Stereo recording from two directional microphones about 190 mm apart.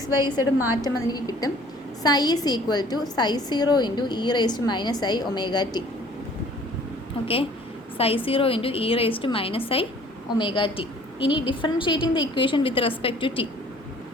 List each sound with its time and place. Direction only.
0.3 s a woman's voice: 10° right (ahead or behind)
0.9 s a woman's voice: 20° left (ahead or behind)
7.9 s a woman's voice: 30° left (ahead or behind)